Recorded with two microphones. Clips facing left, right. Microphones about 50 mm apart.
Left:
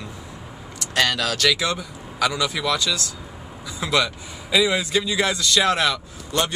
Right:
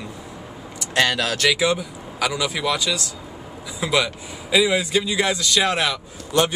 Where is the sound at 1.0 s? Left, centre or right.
Right.